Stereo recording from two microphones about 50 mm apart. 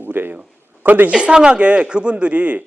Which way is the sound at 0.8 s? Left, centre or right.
Right.